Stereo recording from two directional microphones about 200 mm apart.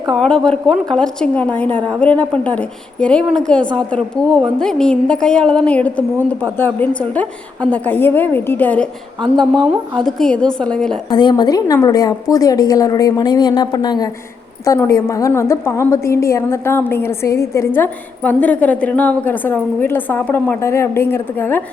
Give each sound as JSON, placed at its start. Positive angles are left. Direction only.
{"t": 0.1, "sound": "a woman's voice", "side_deg": 5}
{"t": 10.0, "sound": "a woman's voice", "side_deg": 0}
{"t": 11.1, "sound": "a woman's voice", "side_deg": 20}